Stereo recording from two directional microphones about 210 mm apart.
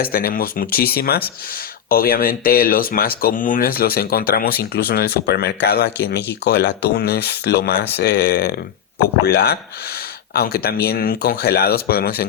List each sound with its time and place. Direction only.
0.0 s speech: 45° left (ahead or behind)